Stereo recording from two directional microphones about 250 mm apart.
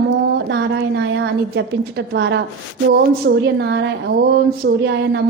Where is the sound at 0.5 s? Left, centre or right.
Right.